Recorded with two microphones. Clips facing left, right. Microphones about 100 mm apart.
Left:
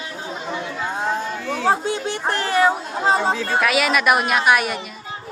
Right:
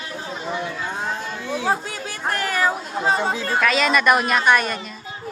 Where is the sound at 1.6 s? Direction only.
25° left (ahead or behind).